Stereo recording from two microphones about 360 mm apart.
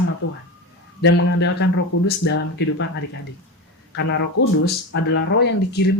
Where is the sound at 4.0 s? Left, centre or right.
Left.